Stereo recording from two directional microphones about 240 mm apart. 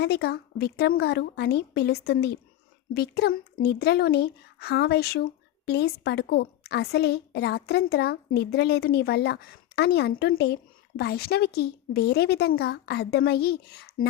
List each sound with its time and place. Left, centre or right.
0.0 s a woman's voice: left